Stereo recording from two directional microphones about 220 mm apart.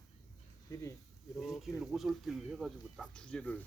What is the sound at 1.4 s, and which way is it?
Speech, centre (ahead or behind).